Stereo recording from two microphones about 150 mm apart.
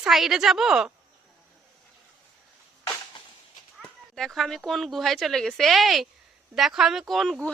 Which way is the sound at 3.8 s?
5° left (ahead or behind).